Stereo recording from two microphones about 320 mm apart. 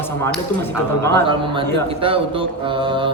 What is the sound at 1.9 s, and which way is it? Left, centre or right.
Speech, centre.